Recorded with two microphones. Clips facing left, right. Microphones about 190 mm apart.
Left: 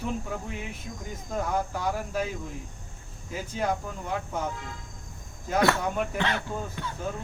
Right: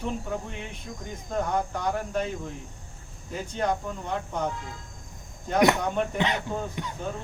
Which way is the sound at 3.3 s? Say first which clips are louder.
Right 1 dB; 5° left (ahead or behind).